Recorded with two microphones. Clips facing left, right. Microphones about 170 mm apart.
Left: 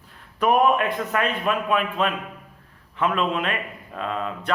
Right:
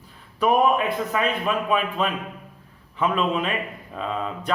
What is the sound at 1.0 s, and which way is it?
Speech, centre (ahead or behind).